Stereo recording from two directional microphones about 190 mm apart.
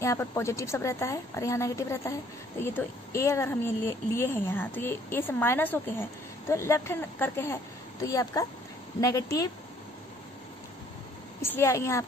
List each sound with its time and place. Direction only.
0.0 s a woman's voice: 15° left (ahead or behind)
11.4 s a woman's voice: 15° left (ahead or behind)